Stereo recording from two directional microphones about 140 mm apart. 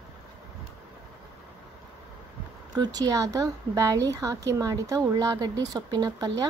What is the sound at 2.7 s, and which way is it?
A woman's voice, 30° right (ahead or behind).